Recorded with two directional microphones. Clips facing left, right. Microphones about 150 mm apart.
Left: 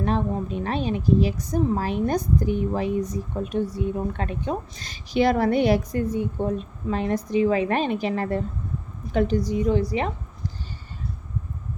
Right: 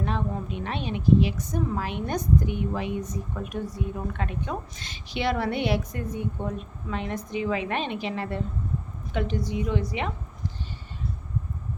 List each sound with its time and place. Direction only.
0.0 s a woman's voice: 35° left (ahead or behind)